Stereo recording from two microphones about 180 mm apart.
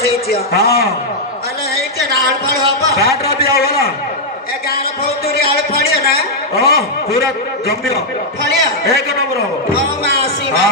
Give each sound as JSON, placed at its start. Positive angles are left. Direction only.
{"t": 0.3, "sound": "a man's voice", "side_deg": 60}
{"t": 3.5, "sound": "a sound", "side_deg": 60}
{"t": 5.4, "sound": "a sound", "side_deg": 60}
{"t": 6.6, "sound": "a man's voice", "side_deg": 60}
{"t": 8.4, "sound": "a man's voice", "side_deg": 60}
{"t": 10.0, "sound": "music", "side_deg": 60}